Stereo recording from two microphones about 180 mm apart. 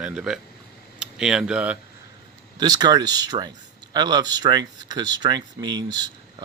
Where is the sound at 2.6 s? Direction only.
20° right (ahead or behind).